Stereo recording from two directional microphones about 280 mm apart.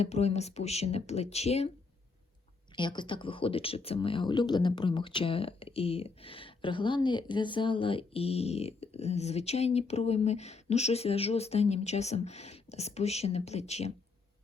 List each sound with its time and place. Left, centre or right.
0.0 s speech: left
2.7 s speech: centre